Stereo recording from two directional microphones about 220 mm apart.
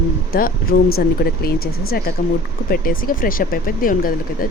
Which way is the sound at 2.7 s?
40° left (ahead or behind).